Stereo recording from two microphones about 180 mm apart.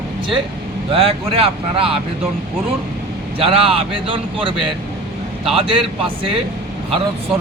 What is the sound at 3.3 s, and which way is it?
Speech, 30° right (ahead or behind).